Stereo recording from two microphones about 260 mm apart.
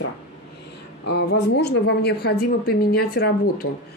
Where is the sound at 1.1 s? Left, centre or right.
Left.